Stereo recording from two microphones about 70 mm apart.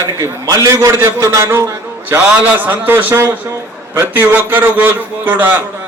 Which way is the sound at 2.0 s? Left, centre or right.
Right.